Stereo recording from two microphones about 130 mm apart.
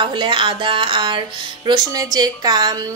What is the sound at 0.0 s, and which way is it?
Speech, 35° right (ahead or behind).